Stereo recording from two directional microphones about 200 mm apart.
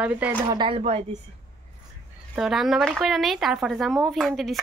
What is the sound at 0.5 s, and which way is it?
Speech, 25° right (ahead or behind).